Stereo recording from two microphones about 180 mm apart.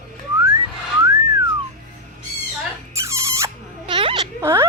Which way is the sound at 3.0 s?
15° right (ahead or behind).